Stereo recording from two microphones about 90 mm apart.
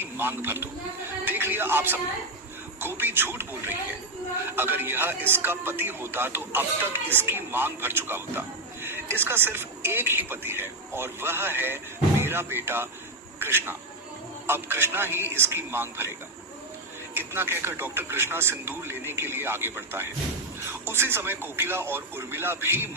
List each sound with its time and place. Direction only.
0.0 s speech: 25° right (ahead or behind)
1.2 s music: 20° right (ahead or behind)
2.8 s speech: 25° right (ahead or behind)
17.2 s speech: 25° right (ahead or behind)